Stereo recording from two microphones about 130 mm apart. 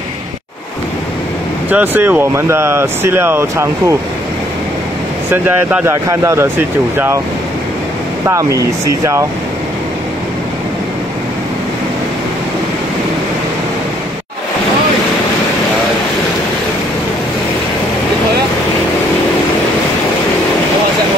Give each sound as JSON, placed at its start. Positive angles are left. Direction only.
{"t": 1.7, "sound": "speech", "side_deg": -15}
{"t": 5.3, "sound": "speech", "side_deg": -10}
{"t": 8.3, "sound": "speech", "side_deg": -25}